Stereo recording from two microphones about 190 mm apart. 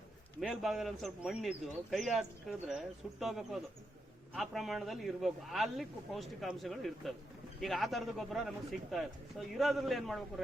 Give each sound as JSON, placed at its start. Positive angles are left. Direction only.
{"t": 0.3, "sound": "speech", "side_deg": 0}